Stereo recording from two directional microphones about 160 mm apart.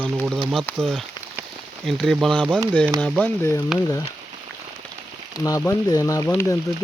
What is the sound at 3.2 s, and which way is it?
Frying, 15° left (ahead or behind).